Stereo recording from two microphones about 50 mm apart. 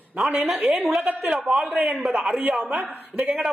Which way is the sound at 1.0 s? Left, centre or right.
Right.